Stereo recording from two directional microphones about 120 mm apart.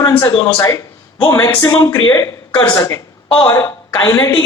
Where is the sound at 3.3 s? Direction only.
40° left (ahead or behind).